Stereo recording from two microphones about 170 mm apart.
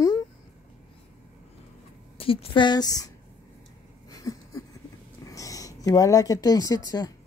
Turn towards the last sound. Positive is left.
turn(degrees=20)  # may be behind; listen again after turning